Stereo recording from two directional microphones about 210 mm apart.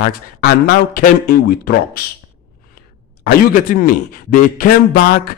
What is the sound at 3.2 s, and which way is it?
A man's voice, 45° left (ahead or behind).